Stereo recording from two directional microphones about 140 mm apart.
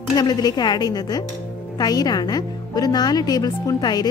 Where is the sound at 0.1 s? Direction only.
30° left (ahead or behind).